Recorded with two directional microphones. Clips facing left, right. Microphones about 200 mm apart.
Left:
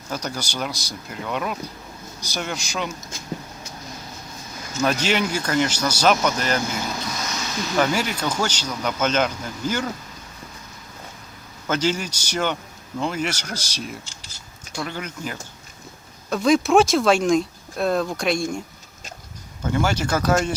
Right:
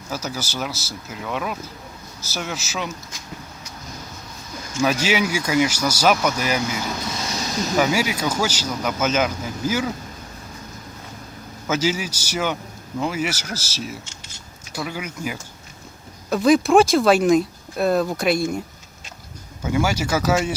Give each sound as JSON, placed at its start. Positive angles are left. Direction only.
{"t": 0.1, "sound": "speech", "side_deg": -5}
{"t": 4.8, "sound": "speech", "side_deg": -5}
{"t": 7.2, "sound": "a sound", "side_deg": -30}
{"t": 7.8, "sound": "speech", "side_deg": -5}
{"t": 11.7, "sound": "speech", "side_deg": -5}
{"t": 14.0, "sound": "speech", "side_deg": 35}
{"t": 14.7, "sound": "speech", "side_deg": -5}
{"t": 19.6, "sound": "speech", "side_deg": -10}